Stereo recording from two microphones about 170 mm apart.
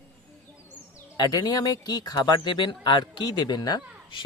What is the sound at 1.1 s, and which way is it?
Speech, 20° left (ahead or behind).